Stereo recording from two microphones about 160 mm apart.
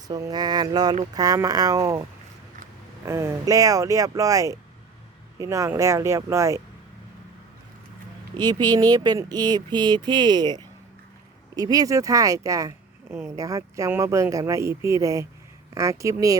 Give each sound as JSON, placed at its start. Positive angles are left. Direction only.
{"t": 0.1, "sound": "speech", "side_deg": -25}
{"t": 3.1, "sound": "speech", "side_deg": -15}
{"t": 8.4, "sound": "speech", "side_deg": -25}